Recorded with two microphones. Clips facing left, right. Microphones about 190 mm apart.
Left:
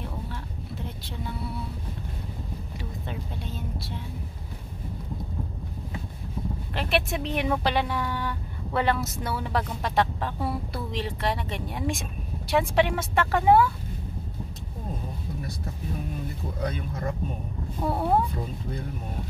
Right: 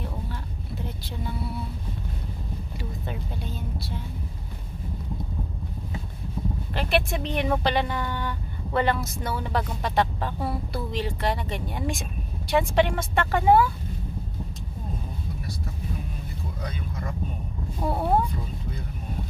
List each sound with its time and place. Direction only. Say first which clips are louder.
0.8 s vehicle: right 3 dB; centre (ahead or behind)
2.8 s vehicle: right 1 dB; centre (ahead or behind)
6.7 s speech: right 1 dB; centre (ahead or behind)
16.6 s vehicle: left 6 dB; 45° left (ahead or behind)
17.8 s speech: even; centre (ahead or behind)